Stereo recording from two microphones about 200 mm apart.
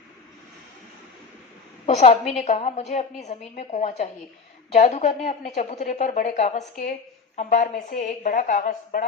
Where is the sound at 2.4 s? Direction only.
35° left (ahead or behind).